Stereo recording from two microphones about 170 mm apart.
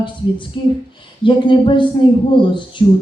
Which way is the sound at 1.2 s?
30° left (ahead or behind).